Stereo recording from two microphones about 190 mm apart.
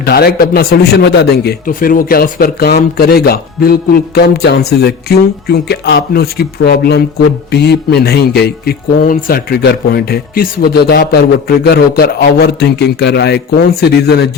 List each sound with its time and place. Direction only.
0.0 s speech: 55° left (ahead or behind)